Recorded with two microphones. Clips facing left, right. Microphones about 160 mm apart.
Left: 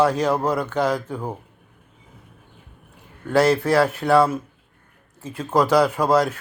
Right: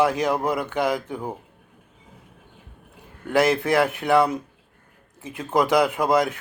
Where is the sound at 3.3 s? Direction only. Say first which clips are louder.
Left 2 dB; 15° right (ahead or behind).